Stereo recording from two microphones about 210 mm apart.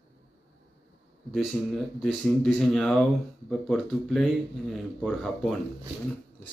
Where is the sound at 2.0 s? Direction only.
Centre (ahead or behind).